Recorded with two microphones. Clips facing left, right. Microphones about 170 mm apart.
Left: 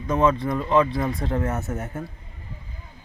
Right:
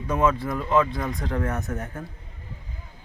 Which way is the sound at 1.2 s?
25° left (ahead or behind).